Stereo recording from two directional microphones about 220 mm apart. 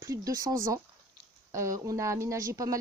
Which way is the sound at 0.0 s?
15° right (ahead or behind).